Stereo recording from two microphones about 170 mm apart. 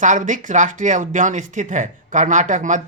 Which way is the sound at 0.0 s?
50° right (ahead or behind).